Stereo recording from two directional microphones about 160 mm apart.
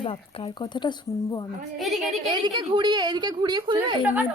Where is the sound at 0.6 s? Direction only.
30° left (ahead or behind).